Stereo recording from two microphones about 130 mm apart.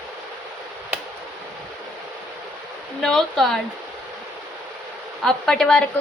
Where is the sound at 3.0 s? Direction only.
Centre (ahead or behind).